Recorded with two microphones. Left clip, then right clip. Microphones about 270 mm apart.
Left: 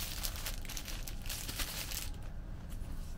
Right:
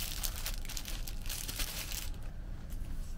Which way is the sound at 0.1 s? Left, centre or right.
Centre.